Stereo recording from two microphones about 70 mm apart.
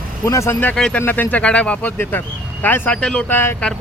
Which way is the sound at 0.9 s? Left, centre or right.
Left.